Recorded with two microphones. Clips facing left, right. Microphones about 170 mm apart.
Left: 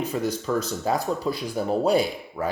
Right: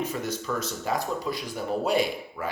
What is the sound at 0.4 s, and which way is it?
Speech, 35° left (ahead or behind).